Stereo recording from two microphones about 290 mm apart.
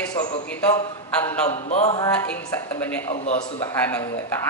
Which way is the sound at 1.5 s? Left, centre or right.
Left.